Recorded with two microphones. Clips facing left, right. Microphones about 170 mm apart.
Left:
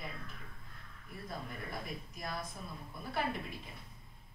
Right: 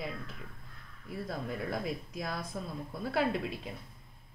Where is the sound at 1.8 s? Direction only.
90° right.